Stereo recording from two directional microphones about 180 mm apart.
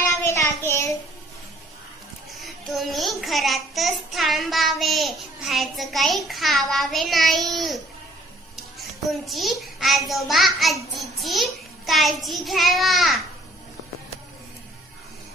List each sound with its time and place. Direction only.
0.0 s child singing: 15° left (ahead or behind)
2.3 s a child's voice: centre (ahead or behind)